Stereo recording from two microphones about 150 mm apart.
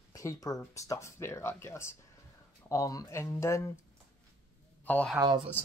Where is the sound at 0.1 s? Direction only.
20° left (ahead or behind).